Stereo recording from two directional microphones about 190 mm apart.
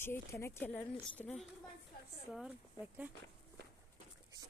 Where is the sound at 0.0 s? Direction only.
15° left (ahead or behind).